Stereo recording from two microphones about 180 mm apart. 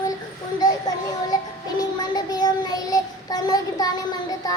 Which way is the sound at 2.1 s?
20° left (ahead or behind).